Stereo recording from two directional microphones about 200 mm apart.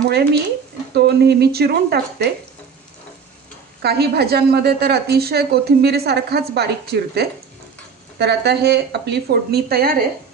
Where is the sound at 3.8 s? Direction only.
55° right (ahead or behind).